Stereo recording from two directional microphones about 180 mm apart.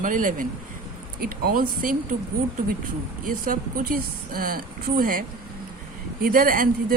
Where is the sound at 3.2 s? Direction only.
50° right (ahead or behind).